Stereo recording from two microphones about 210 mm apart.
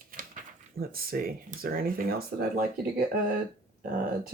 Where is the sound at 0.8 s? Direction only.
45° right (ahead or behind).